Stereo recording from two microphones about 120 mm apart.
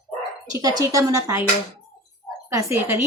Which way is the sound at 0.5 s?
30° right (ahead or behind).